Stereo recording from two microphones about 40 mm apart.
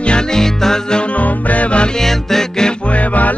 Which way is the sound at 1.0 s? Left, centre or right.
Left.